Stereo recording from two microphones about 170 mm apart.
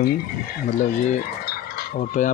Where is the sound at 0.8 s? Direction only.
60° left (ahead or behind).